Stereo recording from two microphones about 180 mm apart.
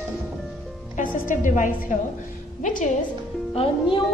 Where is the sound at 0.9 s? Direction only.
45° left (ahead or behind).